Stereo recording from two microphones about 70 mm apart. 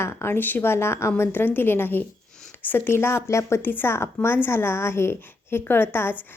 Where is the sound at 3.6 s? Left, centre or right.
Left.